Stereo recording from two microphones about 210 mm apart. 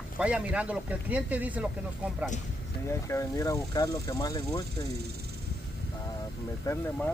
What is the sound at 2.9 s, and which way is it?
Speech, 15° left (ahead or behind).